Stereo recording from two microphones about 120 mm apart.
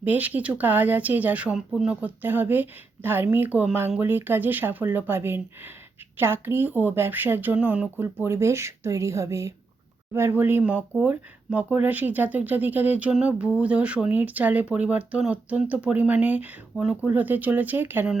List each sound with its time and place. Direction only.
0.0 s speech: 15° right (ahead or behind)